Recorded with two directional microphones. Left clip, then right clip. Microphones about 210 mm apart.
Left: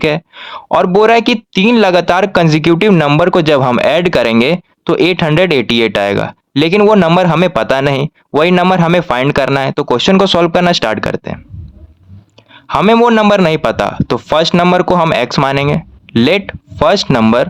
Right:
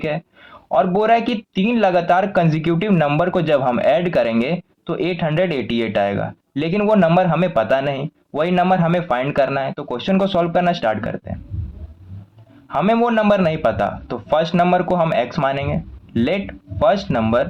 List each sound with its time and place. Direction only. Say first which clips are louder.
0.0 s speech: left 10 dB; 45° left (ahead or behind)
12.6 s speech: left 9 dB; 45° left (ahead or behind)